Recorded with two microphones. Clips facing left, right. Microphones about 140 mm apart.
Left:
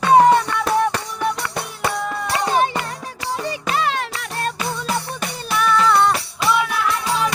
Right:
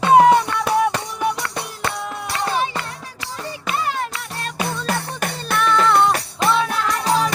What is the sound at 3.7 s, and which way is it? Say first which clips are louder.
Music: left 1 dB; 85° left.